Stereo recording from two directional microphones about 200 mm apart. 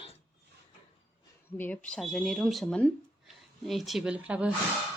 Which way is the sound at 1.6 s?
5° left (ahead or behind).